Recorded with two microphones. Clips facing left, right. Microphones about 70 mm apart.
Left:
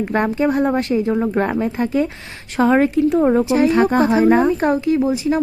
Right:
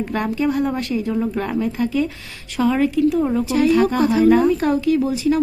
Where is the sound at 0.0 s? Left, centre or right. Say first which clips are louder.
Left 3 dB; left.